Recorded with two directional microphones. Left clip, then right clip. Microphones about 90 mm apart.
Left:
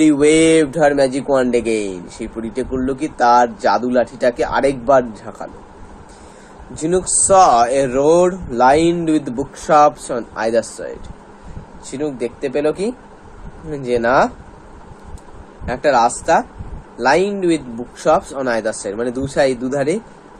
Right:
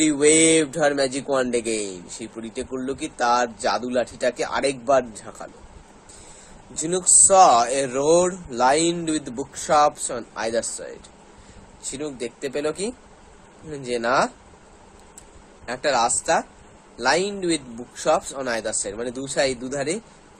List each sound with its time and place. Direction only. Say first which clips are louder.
0.0 s speech: left 6 dB; 30° right (ahead or behind)
6.7 s speech: left 4 dB; 35° right (ahead or behind)
7.3 s speech: left 5 dB; 25° right (ahead or behind)
11.9 s speech: left 8 dB; 40° right (ahead or behind)
15.6 s speech: left 7 dB; 35° right (ahead or behind)